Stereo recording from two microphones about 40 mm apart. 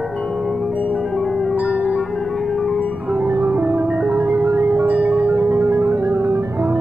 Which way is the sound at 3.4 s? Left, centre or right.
Right.